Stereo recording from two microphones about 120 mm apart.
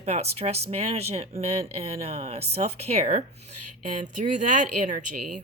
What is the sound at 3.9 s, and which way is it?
Speech, 90° right.